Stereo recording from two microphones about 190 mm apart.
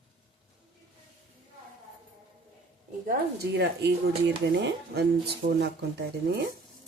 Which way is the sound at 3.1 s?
60° right (ahead or behind).